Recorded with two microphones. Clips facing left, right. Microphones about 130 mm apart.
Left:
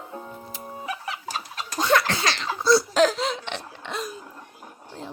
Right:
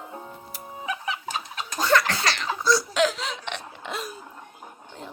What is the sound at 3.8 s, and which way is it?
Cough, centre (ahead or behind).